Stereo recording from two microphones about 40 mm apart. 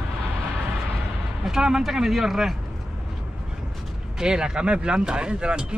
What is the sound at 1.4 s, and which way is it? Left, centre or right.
Speech, centre.